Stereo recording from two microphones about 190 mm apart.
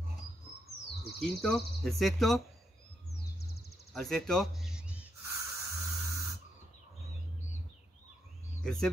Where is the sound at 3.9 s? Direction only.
5° left (ahead or behind).